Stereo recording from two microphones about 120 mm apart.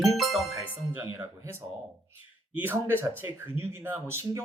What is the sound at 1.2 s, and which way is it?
Speech, 25° right (ahead or behind).